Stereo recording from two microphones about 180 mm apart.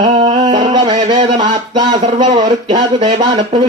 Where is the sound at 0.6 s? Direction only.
25° right (ahead or behind).